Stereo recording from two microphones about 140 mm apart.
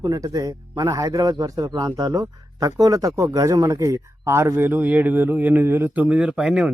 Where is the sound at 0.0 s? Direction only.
25° right (ahead or behind).